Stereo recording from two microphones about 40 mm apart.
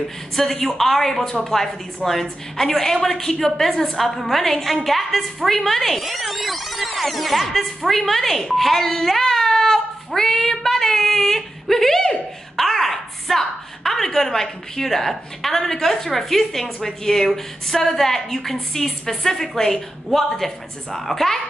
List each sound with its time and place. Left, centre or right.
0.4 s a woman's voice: centre